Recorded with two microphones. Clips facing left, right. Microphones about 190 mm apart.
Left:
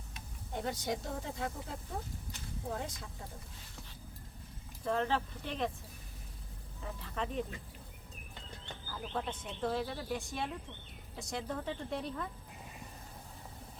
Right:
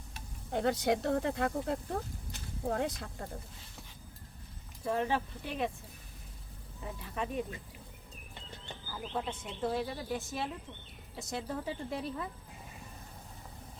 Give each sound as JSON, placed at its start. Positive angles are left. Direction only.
{"t": 0.5, "sound": "speech", "side_deg": -70}
{"t": 4.9, "sound": "speech", "side_deg": -10}
{"t": 6.8, "sound": "speech", "side_deg": -10}
{"t": 8.9, "sound": "speech", "side_deg": -5}